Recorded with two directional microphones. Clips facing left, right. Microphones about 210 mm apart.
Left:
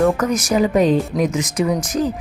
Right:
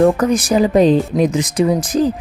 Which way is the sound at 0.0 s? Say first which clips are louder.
Right 4 dB; 30° right (ahead or behind).